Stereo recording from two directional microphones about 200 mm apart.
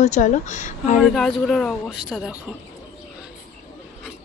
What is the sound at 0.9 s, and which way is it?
Speech, centre (ahead or behind).